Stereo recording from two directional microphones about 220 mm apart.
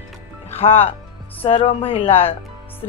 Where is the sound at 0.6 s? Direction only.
25° left (ahead or behind).